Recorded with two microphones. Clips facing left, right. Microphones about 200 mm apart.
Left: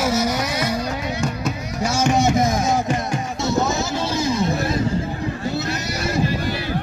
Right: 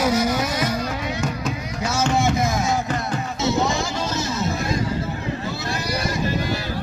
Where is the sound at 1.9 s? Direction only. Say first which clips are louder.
Left 2 dB; 15° left (ahead or behind).